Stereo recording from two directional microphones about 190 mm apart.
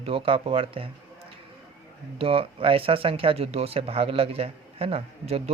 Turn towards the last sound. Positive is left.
turn(degrees=-30)  # may be behind; listen again after turning